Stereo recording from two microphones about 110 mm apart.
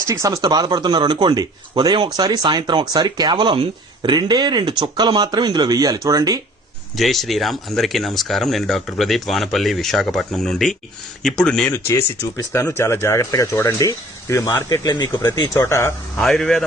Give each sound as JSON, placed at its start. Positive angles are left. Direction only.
{"t": 0.1, "sound": "speech", "side_deg": -30}
{"t": 6.9, "sound": "speech", "side_deg": 0}
{"t": 11.7, "sound": "speech", "side_deg": 25}
{"t": 16.1, "sound": "speech", "side_deg": 5}